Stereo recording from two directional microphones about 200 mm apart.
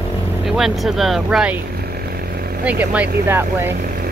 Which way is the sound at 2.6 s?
5° right (ahead or behind).